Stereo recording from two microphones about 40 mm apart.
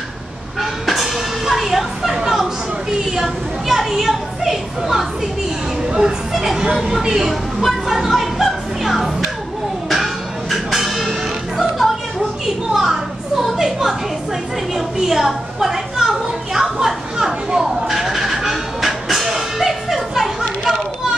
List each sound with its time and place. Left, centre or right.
0.6 s a sound: centre
3.2 s children playing: centre
6.3 s speech: centre
6.6 s speech: centre
7.6 s speech: centre
10.5 s music: centre
12.7 s a sound: centre
15.0 s a sound: centre
17.5 s vehicle: centre
20.6 s children playing: centre